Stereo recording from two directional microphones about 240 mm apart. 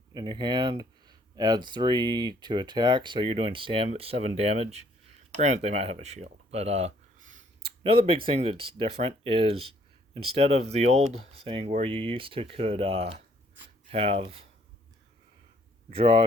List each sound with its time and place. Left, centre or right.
0.1 s speech: centre
7.9 s speech: right
16.0 s speech: right